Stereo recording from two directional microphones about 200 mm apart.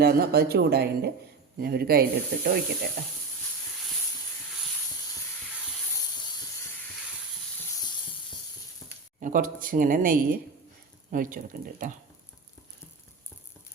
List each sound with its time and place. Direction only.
0.0 s speech: 50° right (ahead or behind)
8.8 s a sound: 5° left (ahead or behind)
9.2 s speech: 40° right (ahead or behind)